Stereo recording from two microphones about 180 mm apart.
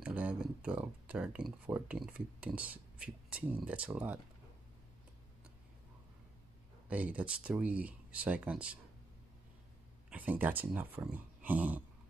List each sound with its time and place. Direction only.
0.0 s speech: 10° right (ahead or behind)
6.9 s speech: 10° right (ahead or behind)
10.1 s speech: 10° right (ahead or behind)